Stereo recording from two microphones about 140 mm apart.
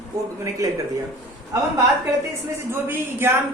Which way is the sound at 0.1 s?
20° right (ahead or behind).